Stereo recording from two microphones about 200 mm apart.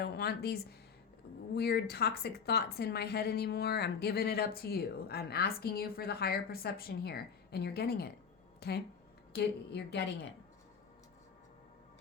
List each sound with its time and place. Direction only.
0.0 s a woman's voice: 55° left (ahead or behind)